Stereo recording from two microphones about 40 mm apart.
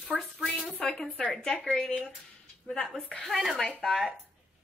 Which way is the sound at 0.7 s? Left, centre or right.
Left.